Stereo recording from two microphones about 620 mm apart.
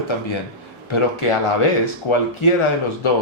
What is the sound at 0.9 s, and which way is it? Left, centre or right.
Speech, left.